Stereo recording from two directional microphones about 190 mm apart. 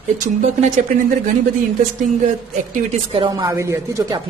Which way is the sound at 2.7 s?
35° right (ahead or behind).